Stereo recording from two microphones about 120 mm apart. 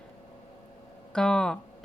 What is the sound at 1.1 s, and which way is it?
Speech, 5° left (ahead or behind).